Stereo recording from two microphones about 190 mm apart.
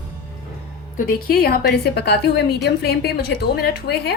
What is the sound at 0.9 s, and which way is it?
A woman's voice, 50° left (ahead or behind).